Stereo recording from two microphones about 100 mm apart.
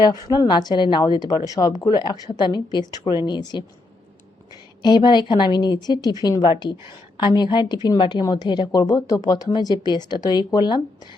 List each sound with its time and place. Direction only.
0.3 s a woman's voice: 45° left (ahead or behind)
4.8 s speech: 45° left (ahead or behind)